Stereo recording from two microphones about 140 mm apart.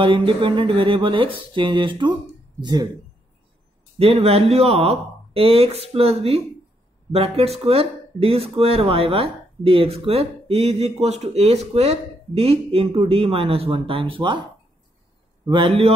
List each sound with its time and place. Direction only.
0.0 s speech: 35° right (ahead or behind)
4.0 s speech: 45° right (ahead or behind)
15.4 s speech: 35° right (ahead or behind)